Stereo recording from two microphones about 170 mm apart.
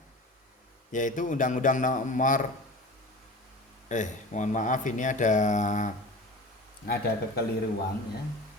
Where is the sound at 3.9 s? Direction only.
45° left (ahead or behind).